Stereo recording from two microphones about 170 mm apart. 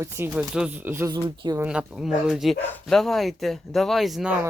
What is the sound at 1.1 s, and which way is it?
Speech, 25° right (ahead or behind).